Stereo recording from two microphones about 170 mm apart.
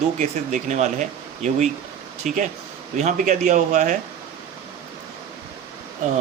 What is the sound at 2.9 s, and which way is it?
A man's voice, 40° right (ahead or behind).